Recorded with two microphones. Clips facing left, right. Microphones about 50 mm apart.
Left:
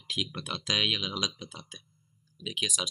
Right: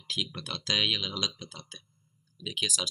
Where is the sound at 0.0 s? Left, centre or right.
Centre.